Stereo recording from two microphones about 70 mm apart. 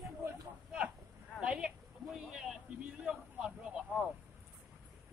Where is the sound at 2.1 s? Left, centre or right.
Centre.